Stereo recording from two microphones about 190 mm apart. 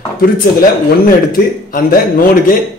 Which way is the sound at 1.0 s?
50° left (ahead or behind).